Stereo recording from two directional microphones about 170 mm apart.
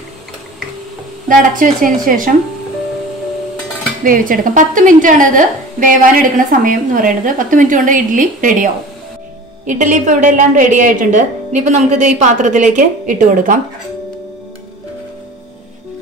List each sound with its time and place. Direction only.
1.3 s a woman's voice: 55° right (ahead or behind)
4.0 s a woman's voice: 55° right (ahead or behind)
9.7 s a woman's voice: 45° right (ahead or behind)